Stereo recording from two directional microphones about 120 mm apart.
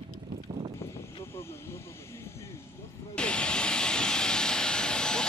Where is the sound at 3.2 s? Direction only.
10° left (ahead or behind).